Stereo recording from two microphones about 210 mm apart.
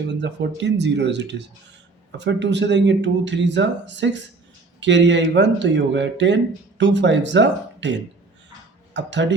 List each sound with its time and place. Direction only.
0.1 s speech: 55° right (ahead or behind)